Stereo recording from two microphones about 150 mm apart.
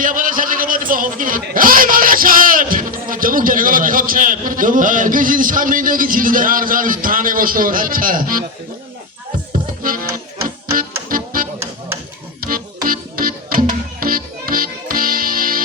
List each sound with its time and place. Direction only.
0.0 s a man's voice: 65° right (ahead or behind)
9.8 s music: 70° right (ahead or behind)
11.1 s music: 70° right (ahead or behind)